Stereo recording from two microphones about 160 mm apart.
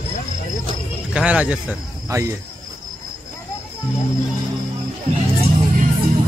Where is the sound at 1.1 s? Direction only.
5° right (ahead or behind).